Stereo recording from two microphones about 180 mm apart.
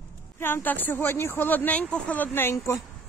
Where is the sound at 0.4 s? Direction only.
10° left (ahead or behind).